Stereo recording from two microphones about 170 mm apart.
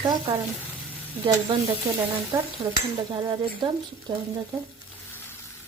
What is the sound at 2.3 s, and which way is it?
Speech, 25° right (ahead or behind).